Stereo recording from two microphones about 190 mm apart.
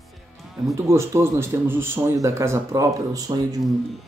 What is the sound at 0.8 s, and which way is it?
Speech, 15° right (ahead or behind).